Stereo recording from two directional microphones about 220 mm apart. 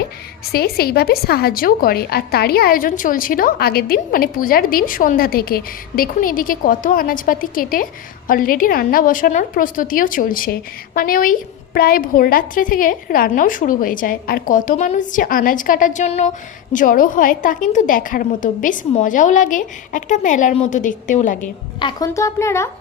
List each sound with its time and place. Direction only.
0.5 s a woman's voice: 45° left (ahead or behind)
21.8 s speech: 20° left (ahead or behind)